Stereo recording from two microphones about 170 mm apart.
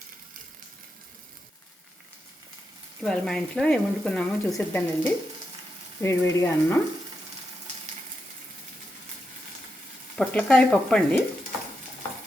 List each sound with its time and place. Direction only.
3.0 s speech: 5° left (ahead or behind)
10.2 s speech: 5° left (ahead or behind)